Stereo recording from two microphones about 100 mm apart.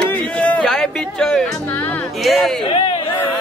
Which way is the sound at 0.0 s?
15° left (ahead or behind).